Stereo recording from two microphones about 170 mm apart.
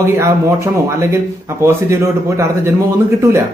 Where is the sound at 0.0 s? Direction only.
15° right (ahead or behind).